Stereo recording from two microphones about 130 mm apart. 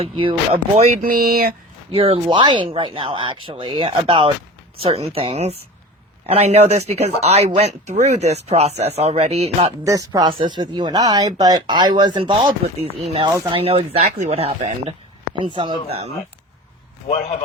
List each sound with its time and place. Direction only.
0.0 s speech: 45° right (ahead or behind)
1.0 s a sound: 90° right
1.9 s speech: 50° right (ahead or behind)
2.2 s speech: 35° right (ahead or behind); by 9.7 s 55° right (ahead or behind)
9.8 s speech: 25° right (ahead or behind)
13.5 s speech: 45° right (ahead or behind)